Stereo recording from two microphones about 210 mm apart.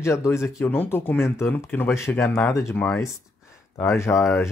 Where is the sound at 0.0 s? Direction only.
15° left (ahead or behind).